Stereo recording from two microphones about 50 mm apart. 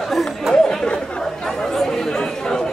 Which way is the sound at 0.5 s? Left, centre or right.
Centre.